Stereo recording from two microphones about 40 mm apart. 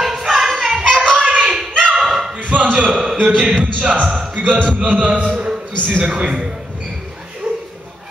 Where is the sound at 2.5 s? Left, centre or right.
Right.